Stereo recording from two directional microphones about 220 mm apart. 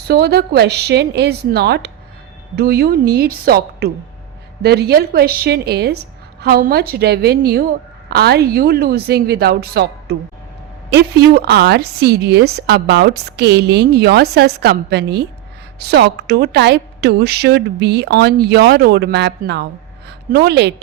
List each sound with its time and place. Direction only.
0.1 s a woman's voice: 45° right (ahead or behind)